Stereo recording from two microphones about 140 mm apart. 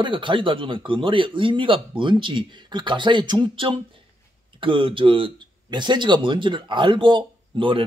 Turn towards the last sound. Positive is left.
turn(degrees=-35)  # may be behind; listen again after turning